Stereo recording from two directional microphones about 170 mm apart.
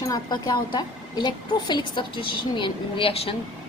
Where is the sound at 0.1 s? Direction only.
25° left (ahead or behind).